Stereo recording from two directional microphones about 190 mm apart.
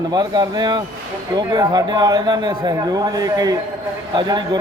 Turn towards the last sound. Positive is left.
turn(degrees=-25)  # may be behind; listen again after turning